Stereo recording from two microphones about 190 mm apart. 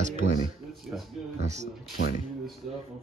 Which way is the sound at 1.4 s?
35° right (ahead or behind).